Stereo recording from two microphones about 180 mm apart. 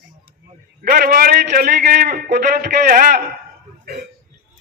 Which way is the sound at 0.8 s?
55° right (ahead or behind).